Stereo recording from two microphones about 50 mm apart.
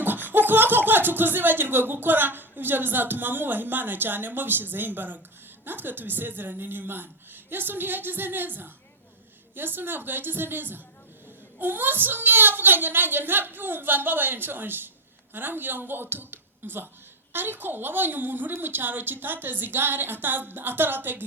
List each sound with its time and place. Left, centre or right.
0.0 s a woman's voice: right